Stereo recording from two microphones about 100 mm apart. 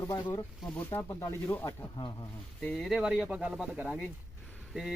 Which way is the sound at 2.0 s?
50° left (ahead or behind).